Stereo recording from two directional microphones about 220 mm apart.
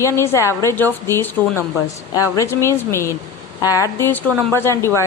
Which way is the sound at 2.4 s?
10° left (ahead or behind).